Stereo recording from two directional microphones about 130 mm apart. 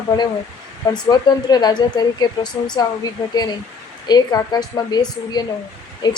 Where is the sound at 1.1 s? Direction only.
30° left (ahead or behind).